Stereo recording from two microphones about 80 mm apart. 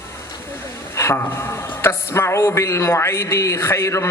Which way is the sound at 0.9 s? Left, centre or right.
Left.